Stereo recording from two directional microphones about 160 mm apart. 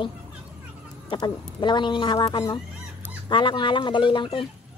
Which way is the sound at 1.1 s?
30° left (ahead or behind).